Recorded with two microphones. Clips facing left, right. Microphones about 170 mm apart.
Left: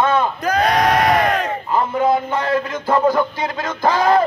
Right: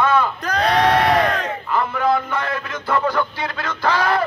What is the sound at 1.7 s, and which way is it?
Speech, 20° left (ahead or behind).